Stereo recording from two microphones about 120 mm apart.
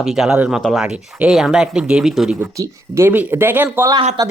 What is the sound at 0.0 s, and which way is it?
Speech, 5° right (ahead or behind).